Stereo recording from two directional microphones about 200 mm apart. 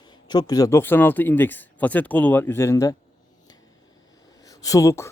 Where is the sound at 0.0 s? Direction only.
20° left (ahead or behind).